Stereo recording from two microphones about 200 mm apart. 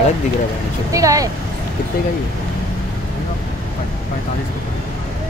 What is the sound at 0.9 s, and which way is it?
Speech, 15° right (ahead or behind).